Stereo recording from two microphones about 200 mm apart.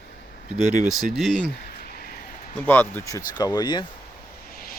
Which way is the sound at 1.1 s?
Centre (ahead or behind).